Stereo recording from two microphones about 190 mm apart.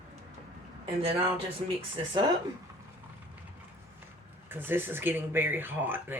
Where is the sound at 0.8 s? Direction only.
30° right (ahead or behind).